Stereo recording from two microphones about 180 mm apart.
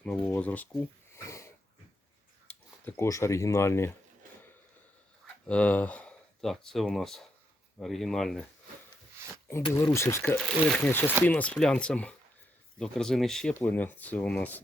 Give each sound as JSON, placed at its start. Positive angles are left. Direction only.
{"t": 0.0, "sound": "speech", "side_deg": 10}
{"t": 1.1, "sound": "sniff", "side_deg": 15}
{"t": 2.8, "sound": "speech", "side_deg": 15}
{"t": 5.5, "sound": "speech", "side_deg": 5}
{"t": 9.7, "sound": "speech", "side_deg": 15}
{"t": 10.4, "sound": "speech", "side_deg": 0}